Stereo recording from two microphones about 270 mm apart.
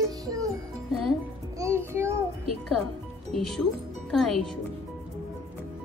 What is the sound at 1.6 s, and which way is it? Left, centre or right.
Child singing, centre.